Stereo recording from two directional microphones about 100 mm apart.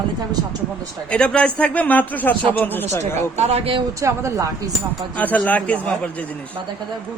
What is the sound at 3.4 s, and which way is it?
Speech, 90° right.